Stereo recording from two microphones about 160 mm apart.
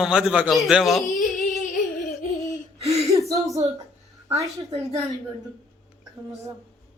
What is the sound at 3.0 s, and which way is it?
Gasp, 20° right (ahead or behind).